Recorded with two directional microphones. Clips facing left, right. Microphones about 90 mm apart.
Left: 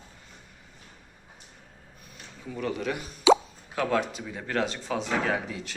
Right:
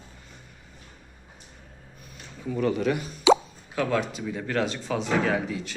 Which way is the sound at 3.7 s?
40° left (ahead or behind).